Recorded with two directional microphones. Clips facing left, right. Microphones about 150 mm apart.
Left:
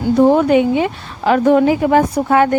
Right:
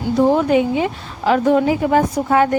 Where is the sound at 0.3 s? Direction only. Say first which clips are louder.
Left 3 dB; 65° left (ahead or behind).